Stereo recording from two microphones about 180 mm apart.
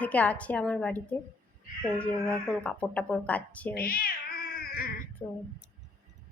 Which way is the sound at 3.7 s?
55° left (ahead or behind).